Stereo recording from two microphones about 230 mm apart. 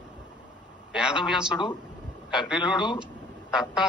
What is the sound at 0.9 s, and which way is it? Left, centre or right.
A man's voice, centre.